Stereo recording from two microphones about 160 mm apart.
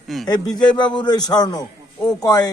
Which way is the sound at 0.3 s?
25° left (ahead or behind).